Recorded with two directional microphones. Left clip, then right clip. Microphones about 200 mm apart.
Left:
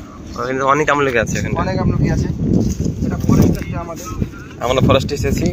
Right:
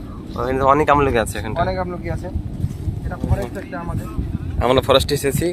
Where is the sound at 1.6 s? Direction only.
5° left (ahead or behind).